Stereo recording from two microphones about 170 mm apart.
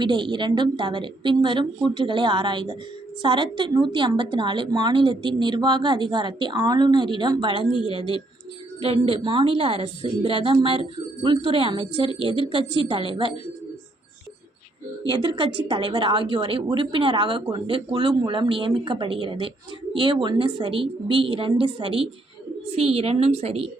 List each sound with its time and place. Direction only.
0.0 s a woman's voice: 30° right (ahead or behind)
8.8 s a woman's voice: 35° right (ahead or behind)
15.1 s a woman's voice: 30° right (ahead or behind)